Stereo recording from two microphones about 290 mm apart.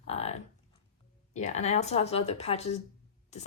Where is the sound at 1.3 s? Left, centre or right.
Left.